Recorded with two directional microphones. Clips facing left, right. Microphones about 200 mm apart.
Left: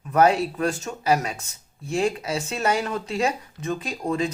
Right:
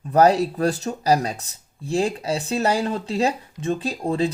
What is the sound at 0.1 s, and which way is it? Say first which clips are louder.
Speech: right 3 dB; 35° right (ahead or behind).